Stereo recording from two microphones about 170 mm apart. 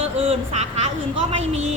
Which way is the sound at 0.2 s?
40° right (ahead or behind).